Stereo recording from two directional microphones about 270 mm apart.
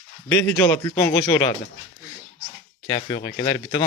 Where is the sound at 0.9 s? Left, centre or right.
Centre.